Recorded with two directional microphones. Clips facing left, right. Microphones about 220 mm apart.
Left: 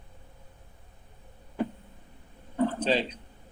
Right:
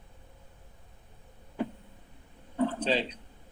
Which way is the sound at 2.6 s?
45° left (ahead or behind).